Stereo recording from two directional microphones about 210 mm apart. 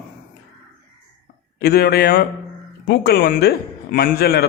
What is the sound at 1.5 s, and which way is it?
Speech, 45° left (ahead or behind).